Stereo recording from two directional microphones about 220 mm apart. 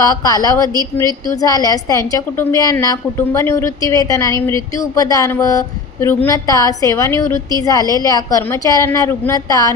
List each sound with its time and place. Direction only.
0.2 s a woman's voice: 15° left (ahead or behind)